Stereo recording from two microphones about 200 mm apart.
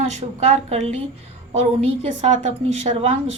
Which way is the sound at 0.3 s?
35° right (ahead or behind).